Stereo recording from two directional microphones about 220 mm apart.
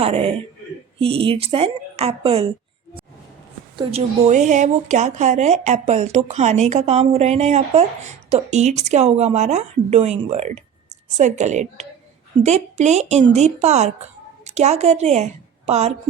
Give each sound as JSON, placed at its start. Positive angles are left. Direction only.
{"t": 0.0, "sound": "a man's voice", "side_deg": -25}